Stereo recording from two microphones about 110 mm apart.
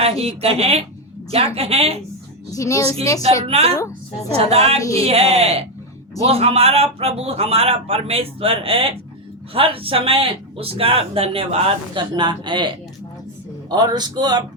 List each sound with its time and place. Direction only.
0.0 s a man's voice: 65° right (ahead or behind)
2.5 s a woman's voice: 30° left (ahead or behind)
3.4 s speech: 65° right (ahead or behind)
4.8 s a woman's voice: 30° left (ahead or behind)
5.0 s a man's voice: 70° right (ahead or behind); by 14.4 s 40° right (ahead or behind)